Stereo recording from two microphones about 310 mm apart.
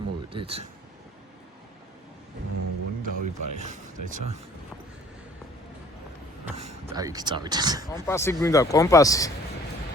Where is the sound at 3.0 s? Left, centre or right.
Right.